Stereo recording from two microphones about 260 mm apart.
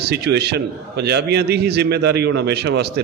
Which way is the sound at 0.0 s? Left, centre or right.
Right.